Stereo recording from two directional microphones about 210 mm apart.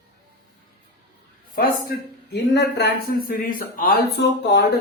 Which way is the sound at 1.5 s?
45° left (ahead or behind).